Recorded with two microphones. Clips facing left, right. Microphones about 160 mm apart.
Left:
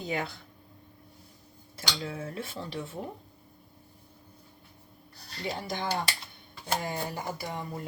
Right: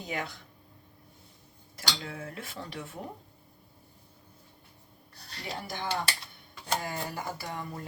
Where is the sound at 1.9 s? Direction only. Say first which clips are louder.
Left 2 dB; 25° left (ahead or behind).